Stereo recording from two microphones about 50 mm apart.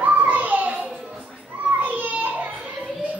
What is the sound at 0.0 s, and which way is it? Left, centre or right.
Children playing, right.